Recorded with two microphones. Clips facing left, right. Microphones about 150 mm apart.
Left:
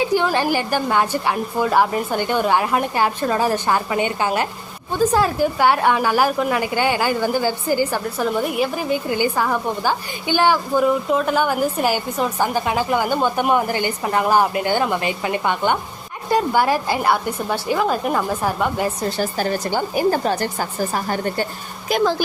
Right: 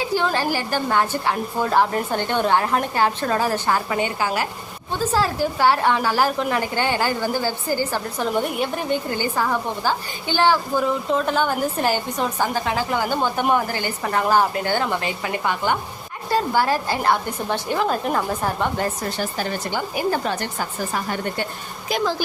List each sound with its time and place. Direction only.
0.0 s a woman's voice: 15° left (ahead or behind)
8.2 s a woman's voice: 5° left (ahead or behind)
19.1 s a woman's voice: 40° left (ahead or behind)
21.8 s speech: 55° left (ahead or behind)